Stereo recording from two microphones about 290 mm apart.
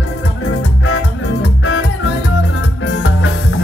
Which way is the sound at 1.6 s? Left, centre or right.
Left.